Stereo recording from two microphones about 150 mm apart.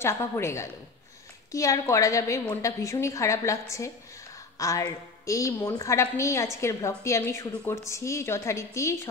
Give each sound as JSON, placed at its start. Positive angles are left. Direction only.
{"t": 0.0, "sound": "a woman's voice", "side_deg": 20}
{"t": 4.6, "sound": "a woman's voice", "side_deg": 20}